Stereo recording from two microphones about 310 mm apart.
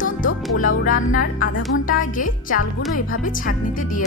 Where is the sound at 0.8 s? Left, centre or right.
Left.